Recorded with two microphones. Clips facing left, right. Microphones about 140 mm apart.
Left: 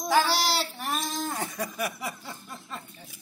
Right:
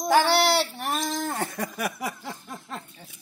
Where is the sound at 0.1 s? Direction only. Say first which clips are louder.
Right 4 dB; 65° right (ahead or behind).